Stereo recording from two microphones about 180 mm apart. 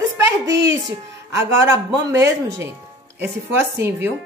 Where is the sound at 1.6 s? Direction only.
15° right (ahead or behind).